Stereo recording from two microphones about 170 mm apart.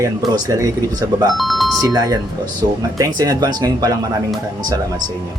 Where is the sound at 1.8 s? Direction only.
20° right (ahead or behind).